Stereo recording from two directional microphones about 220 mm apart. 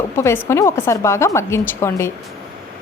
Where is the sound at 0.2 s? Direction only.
10° left (ahead or behind).